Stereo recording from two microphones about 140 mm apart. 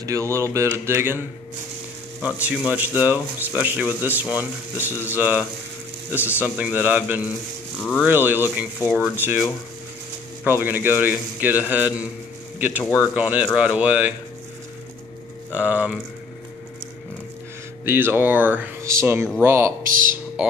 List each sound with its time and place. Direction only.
0.0 s speech: 20° right (ahead or behind)
2.2 s speech: 10° right (ahead or behind)
6.1 s speech: 15° left (ahead or behind)
6.4 s speech: 10° right (ahead or behind)
10.4 s speech: 15° right (ahead or behind)
15.5 s speech: 10° right (ahead or behind)
17.8 s speech: 15° right (ahead or behind)
19.9 s speech: 70° right (ahead or behind)
20.4 s speech: 5° right (ahead or behind)